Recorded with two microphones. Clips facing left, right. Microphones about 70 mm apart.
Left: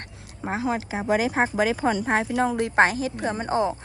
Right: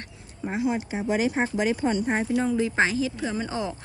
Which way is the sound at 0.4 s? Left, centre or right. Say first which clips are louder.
Even; left.